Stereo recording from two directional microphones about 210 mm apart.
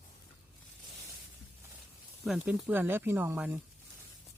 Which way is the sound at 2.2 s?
Centre (ahead or behind).